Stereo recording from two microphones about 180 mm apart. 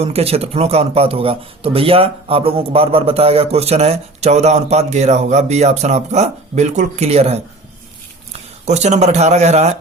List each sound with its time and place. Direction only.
0.0 s speech: 35° right (ahead or behind)
8.6 s speech: 40° right (ahead or behind)